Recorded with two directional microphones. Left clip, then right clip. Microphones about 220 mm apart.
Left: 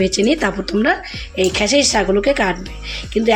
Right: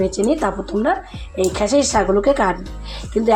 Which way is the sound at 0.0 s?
15° left (ahead or behind).